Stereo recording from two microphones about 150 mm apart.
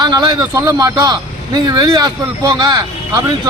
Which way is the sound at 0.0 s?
30° right (ahead or behind).